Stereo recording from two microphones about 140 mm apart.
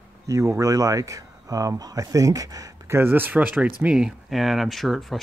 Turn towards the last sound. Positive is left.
turn(degrees=0)  # may be behind; listen again after turning